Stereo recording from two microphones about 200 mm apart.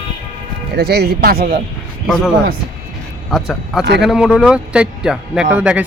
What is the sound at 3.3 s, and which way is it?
A man's voice, centre (ahead or behind).